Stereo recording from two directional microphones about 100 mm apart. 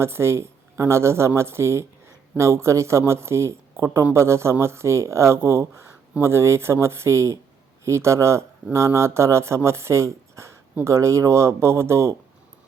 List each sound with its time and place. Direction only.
0.0 s speech: 25° right (ahead or behind)